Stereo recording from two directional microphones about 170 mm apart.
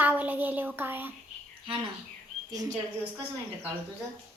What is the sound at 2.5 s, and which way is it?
Speech, 20° right (ahead or behind).